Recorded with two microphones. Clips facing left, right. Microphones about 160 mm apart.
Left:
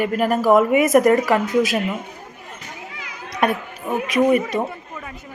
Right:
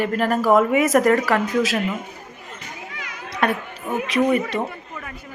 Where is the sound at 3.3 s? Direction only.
15° left (ahead or behind).